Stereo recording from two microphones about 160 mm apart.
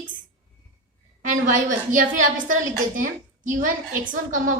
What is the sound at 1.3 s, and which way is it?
A woman's voice, 55° right (ahead or behind).